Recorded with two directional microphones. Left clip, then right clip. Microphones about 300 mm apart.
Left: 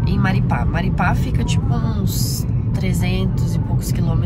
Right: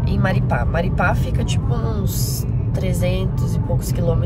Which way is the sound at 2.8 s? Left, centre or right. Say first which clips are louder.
Right 2 dB; centre.